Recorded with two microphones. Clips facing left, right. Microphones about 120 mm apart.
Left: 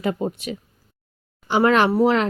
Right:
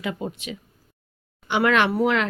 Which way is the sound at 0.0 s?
40° left (ahead or behind).